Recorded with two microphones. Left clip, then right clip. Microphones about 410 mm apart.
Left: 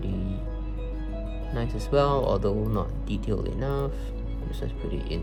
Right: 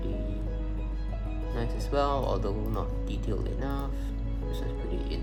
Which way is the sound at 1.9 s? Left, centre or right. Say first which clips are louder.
Left 5 dB; centre.